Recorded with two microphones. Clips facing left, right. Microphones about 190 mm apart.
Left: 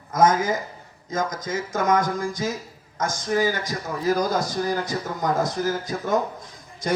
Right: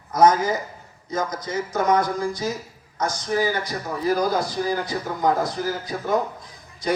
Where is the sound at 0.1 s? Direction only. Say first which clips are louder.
Right 2 dB; 50° left (ahead or behind).